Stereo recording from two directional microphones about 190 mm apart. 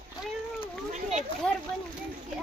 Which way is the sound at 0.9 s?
35° right (ahead or behind).